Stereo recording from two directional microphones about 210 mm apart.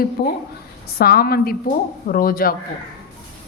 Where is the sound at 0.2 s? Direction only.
50° left (ahead or behind).